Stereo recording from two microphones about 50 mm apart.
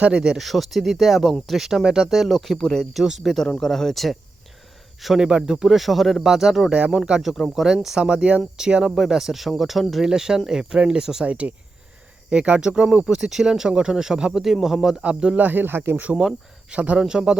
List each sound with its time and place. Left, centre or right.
0.0 s speech: right
0.3 s speech: centre
5.0 s speech: centre
11.3 s speech: right
14.4 s speech: centre
15.0 s speech: centre
15.4 s speech: right
16.1 s speech: centre
16.7 s speech: right